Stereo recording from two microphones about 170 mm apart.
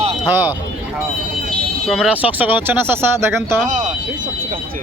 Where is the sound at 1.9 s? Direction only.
5° right (ahead or behind).